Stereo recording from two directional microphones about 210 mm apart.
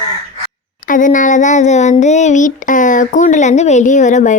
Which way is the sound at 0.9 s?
40° left (ahead or behind).